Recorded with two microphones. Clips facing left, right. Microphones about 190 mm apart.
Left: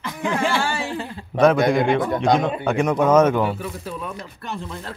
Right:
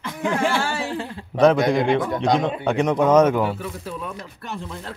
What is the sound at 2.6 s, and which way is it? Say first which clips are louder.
Speech: even; 20° right (ahead or behind).